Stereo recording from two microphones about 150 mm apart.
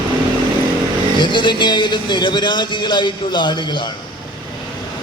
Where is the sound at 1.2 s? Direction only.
30° left (ahead or behind).